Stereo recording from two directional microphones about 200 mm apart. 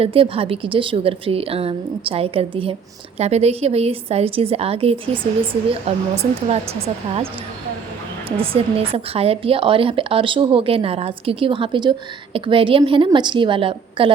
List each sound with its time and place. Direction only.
0.0 s a woman's voice: 30° right (ahead or behind)
8.4 s speech: 30° right (ahead or behind)